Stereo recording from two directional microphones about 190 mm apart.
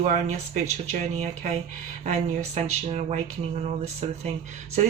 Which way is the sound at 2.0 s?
35° right (ahead or behind).